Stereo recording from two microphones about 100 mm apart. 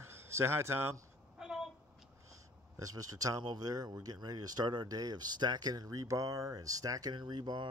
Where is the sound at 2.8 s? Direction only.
35° right (ahead or behind).